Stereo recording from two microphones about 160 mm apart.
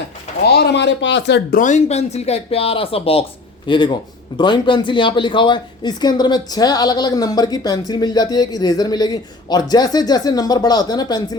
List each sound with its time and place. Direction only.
0.4 s speech: 90° left; by 11.3 s 25° left (ahead or behind)